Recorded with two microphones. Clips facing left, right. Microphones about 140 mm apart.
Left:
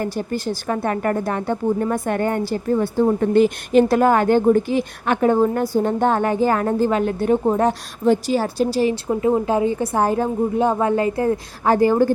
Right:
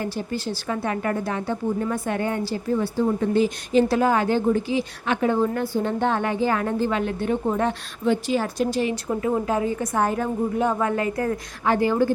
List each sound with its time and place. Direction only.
0.0 s a woman's voice: 50° left (ahead or behind)